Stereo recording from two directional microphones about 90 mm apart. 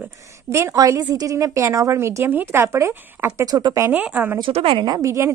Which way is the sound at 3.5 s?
50° right (ahead or behind).